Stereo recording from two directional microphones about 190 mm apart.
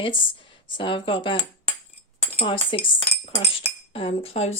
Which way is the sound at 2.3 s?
30° left (ahead or behind).